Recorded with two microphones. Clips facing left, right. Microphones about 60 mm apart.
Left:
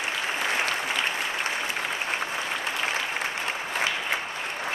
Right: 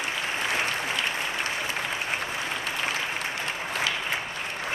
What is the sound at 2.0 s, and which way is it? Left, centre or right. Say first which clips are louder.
Applause: left 1 dB; centre.